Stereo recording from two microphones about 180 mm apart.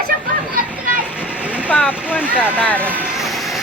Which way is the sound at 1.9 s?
5° right (ahead or behind).